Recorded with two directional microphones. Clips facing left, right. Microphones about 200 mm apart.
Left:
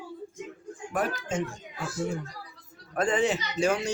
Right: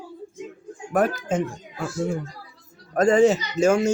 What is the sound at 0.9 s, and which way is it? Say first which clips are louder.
Speech: right 7 dB; 50° right (ahead or behind).